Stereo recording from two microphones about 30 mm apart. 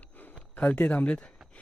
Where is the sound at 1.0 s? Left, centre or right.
Left.